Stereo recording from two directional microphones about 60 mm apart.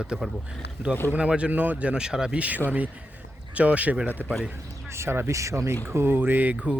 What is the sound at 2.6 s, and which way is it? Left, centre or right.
Speech, right.